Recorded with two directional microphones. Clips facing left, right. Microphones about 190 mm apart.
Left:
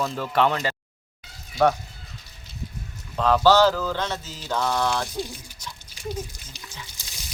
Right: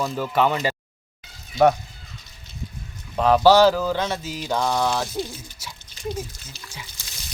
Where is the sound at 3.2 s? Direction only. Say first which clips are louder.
Right 3 dB; 15° right (ahead or behind).